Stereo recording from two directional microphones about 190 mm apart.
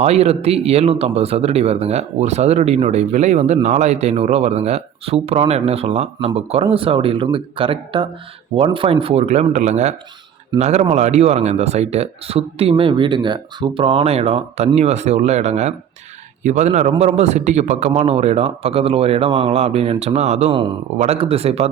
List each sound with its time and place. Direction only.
0.0 s a man's voice: 35° right (ahead or behind)